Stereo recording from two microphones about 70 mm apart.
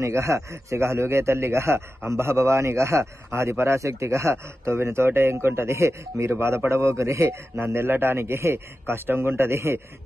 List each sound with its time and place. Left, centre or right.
0.0 s a man's voice: right